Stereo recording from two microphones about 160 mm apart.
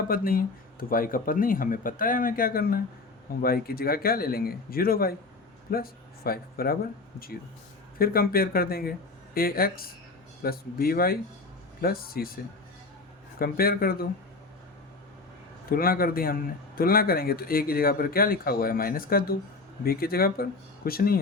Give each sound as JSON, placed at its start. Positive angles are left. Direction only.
{"t": 0.1, "sound": "a man's voice", "side_deg": 65}
{"t": 7.9, "sound": "a man's voice", "side_deg": 70}
{"t": 13.4, "sound": "a man's voice", "side_deg": 70}
{"t": 15.7, "sound": "a man's voice", "side_deg": 65}